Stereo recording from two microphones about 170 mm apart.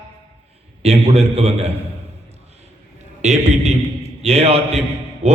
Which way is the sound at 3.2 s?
40° right (ahead or behind).